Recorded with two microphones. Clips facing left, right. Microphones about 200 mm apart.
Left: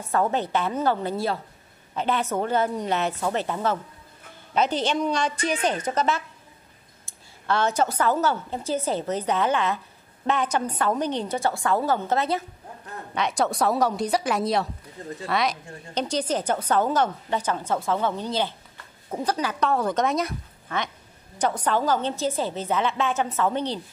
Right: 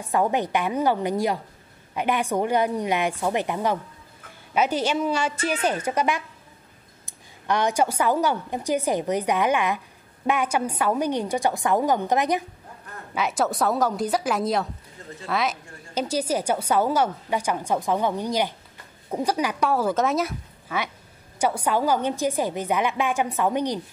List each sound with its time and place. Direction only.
0.1 s a woman's voice: 15° right (ahead or behind)
13.1 s a woman's voice: 5° right (ahead or behind)